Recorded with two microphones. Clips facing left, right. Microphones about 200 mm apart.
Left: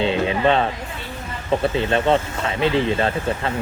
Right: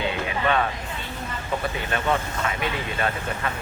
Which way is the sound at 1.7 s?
25° left (ahead or behind).